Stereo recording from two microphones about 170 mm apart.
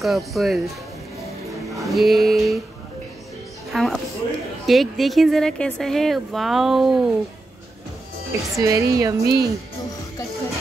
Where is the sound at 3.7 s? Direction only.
Centre (ahead or behind).